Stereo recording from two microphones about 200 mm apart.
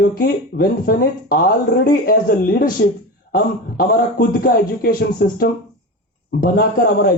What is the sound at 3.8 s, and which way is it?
Speech, 50° left (ahead or behind).